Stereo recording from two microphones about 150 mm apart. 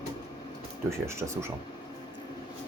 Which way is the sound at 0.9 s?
15° right (ahead or behind).